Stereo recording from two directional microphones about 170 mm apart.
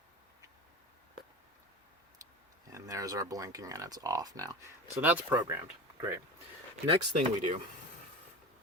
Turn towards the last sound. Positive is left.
turn(degrees=-45)  # may be behind; listen again after turning